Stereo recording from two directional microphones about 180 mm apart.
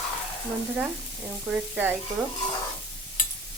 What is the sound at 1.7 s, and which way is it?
Speech, 10° right (ahead or behind).